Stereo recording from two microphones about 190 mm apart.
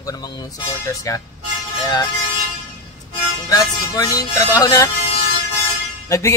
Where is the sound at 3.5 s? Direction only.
20° left (ahead or behind).